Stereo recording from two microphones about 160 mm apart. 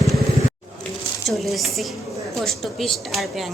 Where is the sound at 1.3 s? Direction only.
Centre (ahead or behind).